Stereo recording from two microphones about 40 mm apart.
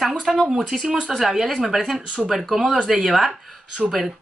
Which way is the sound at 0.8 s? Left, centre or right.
Centre.